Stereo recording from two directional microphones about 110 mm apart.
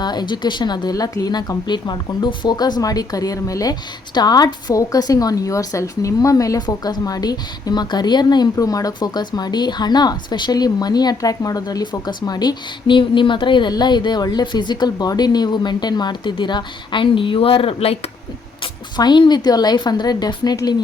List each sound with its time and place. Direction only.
0.0 s speech: 40° left (ahead or behind); by 17.9 s 60° left (ahead or behind)
18.6 s speech: 45° left (ahead or behind)